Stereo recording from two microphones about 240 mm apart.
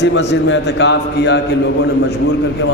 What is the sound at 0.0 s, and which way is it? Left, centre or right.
A man's voice, left.